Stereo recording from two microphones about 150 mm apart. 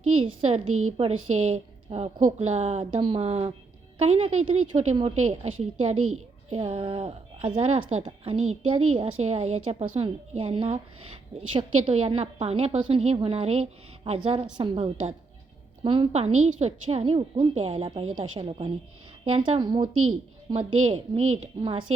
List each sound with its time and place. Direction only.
0.2 s a woman's voice: 40° right (ahead or behind)